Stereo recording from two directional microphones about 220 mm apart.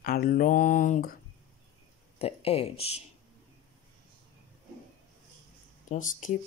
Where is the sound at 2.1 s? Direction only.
25° left (ahead or behind).